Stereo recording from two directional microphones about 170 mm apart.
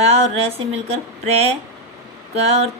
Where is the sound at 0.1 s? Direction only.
35° right (ahead or behind).